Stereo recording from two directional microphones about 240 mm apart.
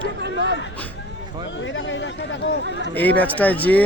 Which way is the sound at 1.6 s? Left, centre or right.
Left.